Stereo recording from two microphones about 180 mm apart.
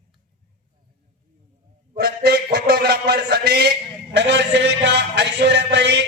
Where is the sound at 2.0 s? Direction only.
60° right (ahead or behind).